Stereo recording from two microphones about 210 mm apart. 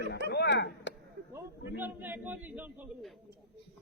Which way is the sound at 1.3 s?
10° right (ahead or behind).